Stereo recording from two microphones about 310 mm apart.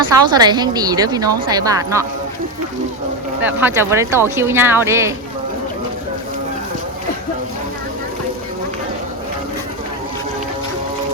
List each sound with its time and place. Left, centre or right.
0.1 s a woman's voice: centre
3.4 s a woman's voice: centre